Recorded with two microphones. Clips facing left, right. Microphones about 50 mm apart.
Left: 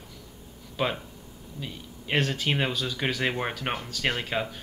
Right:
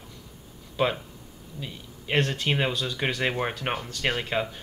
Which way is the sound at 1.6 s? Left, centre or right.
Centre.